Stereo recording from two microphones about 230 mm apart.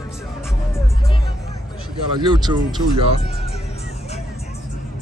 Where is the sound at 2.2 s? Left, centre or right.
Centre.